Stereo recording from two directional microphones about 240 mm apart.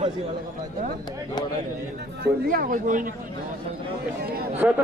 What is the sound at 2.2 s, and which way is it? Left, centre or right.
Speech, right.